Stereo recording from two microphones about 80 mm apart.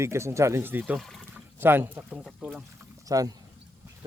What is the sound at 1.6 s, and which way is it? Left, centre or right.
Speech, right.